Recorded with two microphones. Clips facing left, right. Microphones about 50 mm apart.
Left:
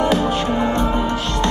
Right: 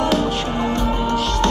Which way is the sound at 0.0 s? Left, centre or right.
Centre.